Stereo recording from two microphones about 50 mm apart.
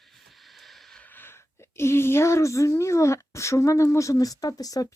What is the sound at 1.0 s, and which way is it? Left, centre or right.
Speech, left.